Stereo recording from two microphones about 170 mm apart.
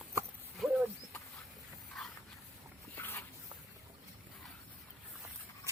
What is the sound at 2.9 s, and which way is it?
Dog, 10° left (ahead or behind).